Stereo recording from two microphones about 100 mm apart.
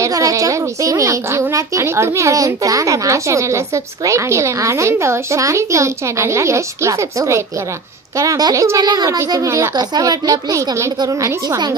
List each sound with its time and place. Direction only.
0.0 s a woman's voice: 35° right (ahead or behind)